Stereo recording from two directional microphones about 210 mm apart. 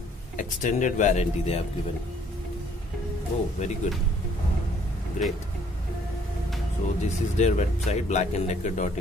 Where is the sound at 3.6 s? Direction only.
35° left (ahead or behind).